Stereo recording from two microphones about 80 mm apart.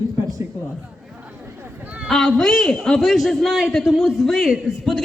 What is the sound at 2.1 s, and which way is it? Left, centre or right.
A man's voice, centre.